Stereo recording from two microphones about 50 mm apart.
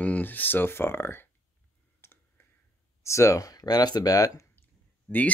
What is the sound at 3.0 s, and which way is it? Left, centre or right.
Speech, left.